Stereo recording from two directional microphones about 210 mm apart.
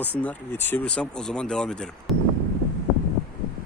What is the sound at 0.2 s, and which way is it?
Speech, 10° left (ahead or behind).